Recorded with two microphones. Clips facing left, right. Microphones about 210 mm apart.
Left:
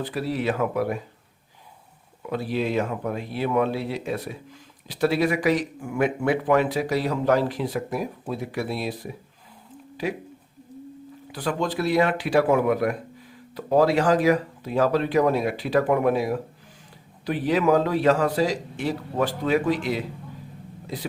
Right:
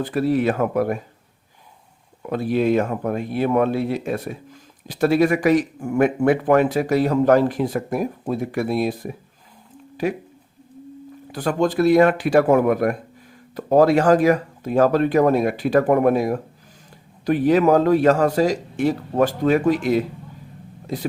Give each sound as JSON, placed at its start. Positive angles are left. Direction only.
{"t": 0.0, "sound": "speech", "side_deg": -50}
{"t": 2.3, "sound": "speech", "side_deg": -50}
{"t": 11.3, "sound": "speech", "side_deg": -45}